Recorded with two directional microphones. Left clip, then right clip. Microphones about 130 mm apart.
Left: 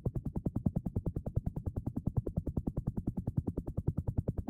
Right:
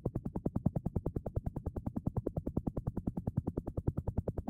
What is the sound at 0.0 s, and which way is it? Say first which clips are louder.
Music: right 1 dB; 35° right (ahead or behind).